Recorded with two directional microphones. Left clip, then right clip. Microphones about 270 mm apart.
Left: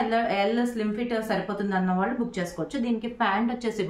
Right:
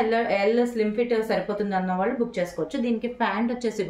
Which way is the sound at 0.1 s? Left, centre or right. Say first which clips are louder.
Right 2 dB; centre.